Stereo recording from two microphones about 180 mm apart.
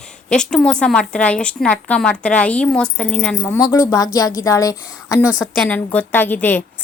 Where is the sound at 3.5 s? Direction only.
20° left (ahead or behind).